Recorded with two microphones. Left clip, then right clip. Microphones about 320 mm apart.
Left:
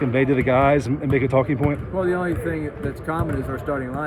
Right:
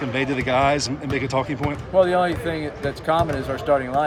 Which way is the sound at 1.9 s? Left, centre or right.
Right.